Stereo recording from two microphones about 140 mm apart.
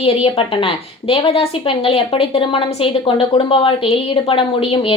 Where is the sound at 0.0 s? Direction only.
40° left (ahead or behind).